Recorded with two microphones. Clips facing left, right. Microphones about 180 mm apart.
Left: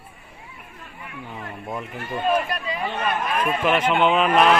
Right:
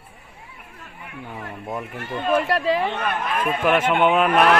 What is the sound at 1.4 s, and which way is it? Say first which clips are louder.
Speech: right 1 dB; 5° right (ahead or behind).